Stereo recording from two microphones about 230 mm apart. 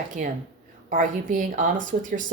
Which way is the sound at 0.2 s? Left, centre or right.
Right.